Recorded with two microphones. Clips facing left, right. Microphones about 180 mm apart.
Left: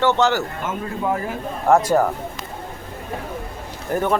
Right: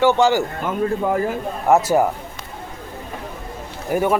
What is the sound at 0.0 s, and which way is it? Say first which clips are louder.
Speech: right 3 dB; 10° right (ahead or behind).